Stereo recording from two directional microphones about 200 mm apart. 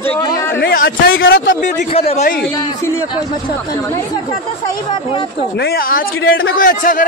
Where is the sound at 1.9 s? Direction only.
30° left (ahead or behind).